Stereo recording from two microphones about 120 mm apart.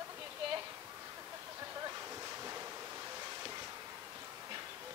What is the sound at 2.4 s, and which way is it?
Waves, 25° right (ahead or behind).